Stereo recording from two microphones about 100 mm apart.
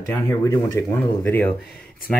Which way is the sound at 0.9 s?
20° left (ahead or behind).